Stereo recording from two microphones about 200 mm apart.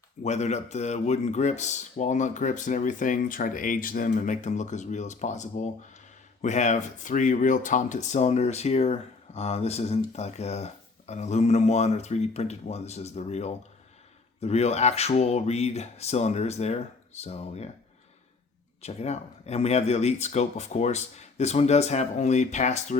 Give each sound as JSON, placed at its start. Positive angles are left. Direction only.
{"t": 0.2, "sound": "speech", "side_deg": 35}
{"t": 18.8, "sound": "speech", "side_deg": 30}